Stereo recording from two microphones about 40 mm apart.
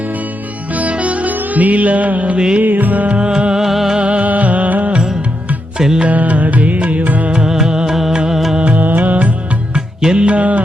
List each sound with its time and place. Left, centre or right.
0.7 s music: right
3.2 s music: right
3.6 s music: centre
3.9 s music: right
5.7 s music: centre
6.1 s music: right
7.3 s music: centre
8.5 s music: right
9.7 s music: right